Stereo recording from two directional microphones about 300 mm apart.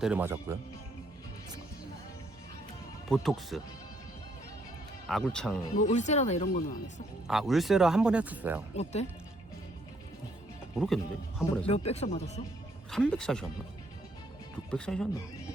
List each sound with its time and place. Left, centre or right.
0.0 s speech: centre
3.1 s speech: centre
5.0 s speech: centre
5.7 s speech: left
7.3 s speech: centre
8.7 s speech: left
10.8 s speech: centre
11.6 s speech: centre
12.9 s speech: centre
14.7 s speech: centre